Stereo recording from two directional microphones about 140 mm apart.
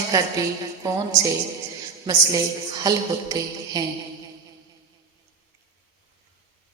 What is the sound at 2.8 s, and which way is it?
A woman's voice, 25° right (ahead or behind).